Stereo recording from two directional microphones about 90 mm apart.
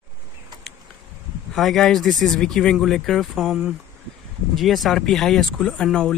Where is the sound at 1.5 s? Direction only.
5° left (ahead or behind).